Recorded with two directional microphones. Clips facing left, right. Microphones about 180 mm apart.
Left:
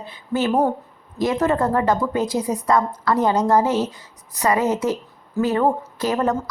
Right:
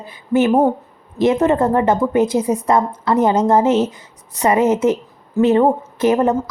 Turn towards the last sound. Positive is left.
turn(degrees=-20)  # may be behind; listen again after turning